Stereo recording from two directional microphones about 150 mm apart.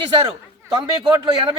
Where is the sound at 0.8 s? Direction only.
35° right (ahead or behind).